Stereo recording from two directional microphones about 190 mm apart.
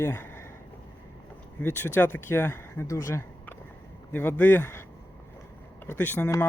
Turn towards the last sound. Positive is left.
turn(degrees=10)  # may be behind; listen again after turning